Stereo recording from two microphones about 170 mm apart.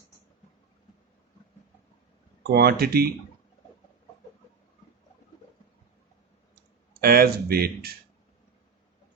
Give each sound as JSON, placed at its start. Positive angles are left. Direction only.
{"t": 2.5, "sound": "speech", "side_deg": -65}
{"t": 7.0, "sound": "speech", "side_deg": -60}